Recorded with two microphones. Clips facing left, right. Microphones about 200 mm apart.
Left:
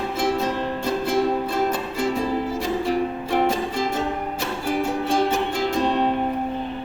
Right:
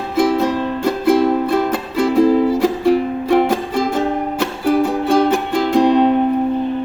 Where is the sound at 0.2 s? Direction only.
65° right (ahead or behind).